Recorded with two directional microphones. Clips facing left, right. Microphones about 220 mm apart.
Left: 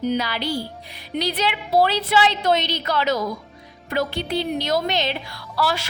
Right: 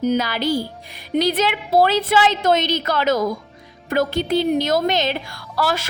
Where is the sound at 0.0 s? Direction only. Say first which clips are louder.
Right 4 dB; 45° right (ahead or behind).